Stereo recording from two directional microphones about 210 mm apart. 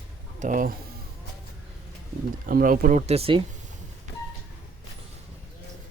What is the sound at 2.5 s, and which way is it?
Speech, 40° right (ahead or behind).